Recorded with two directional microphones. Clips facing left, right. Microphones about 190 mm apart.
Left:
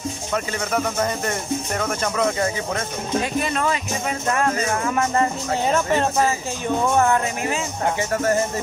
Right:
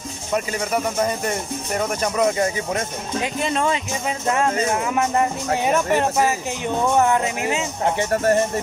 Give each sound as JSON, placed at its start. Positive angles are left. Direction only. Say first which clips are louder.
{"t": 0.3, "sound": "speech", "louder": "right 3 dB", "side_deg": -10}
{"t": 4.8, "sound": "speech", "louder": "even", "side_deg": -10}
{"t": 8.1, "sound": "speech", "louder": "right 3 dB", "side_deg": -30}